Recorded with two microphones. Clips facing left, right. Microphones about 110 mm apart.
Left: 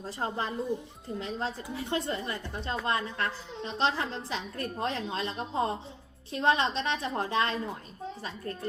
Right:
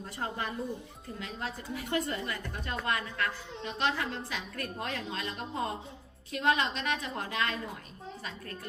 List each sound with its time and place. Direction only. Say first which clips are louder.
0.0 s a woman's voice: left 3 dB; 25° left (ahead or behind)